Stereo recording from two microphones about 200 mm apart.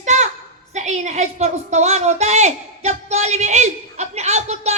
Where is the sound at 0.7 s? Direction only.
35° right (ahead or behind).